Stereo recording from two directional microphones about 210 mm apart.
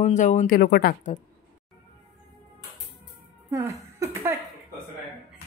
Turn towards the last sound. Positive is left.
turn(degrees=-15)  # may be behind; listen again after turning